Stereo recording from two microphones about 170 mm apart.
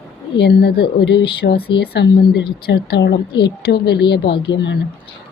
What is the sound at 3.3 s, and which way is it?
Speech, 25° left (ahead or behind).